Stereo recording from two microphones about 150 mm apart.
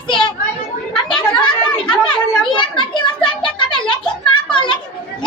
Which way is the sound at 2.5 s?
30° left (ahead or behind).